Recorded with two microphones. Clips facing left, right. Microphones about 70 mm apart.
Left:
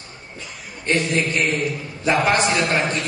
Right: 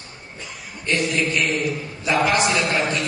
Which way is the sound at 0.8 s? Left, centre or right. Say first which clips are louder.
Left 1 dB; left.